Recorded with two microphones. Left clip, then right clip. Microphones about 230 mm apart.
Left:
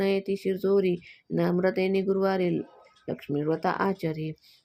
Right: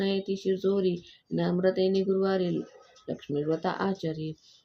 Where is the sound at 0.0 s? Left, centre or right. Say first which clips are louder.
Left 3 dB; left.